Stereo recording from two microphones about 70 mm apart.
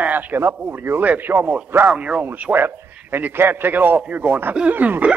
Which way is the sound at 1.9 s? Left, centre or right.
Centre.